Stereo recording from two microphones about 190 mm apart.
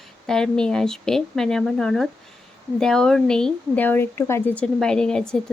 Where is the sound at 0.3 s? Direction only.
5° left (ahead or behind).